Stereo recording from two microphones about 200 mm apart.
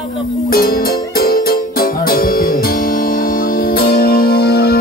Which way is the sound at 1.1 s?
50° left (ahead or behind).